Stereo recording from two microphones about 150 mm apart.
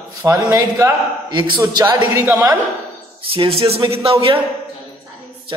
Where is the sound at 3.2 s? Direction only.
40° right (ahead or behind).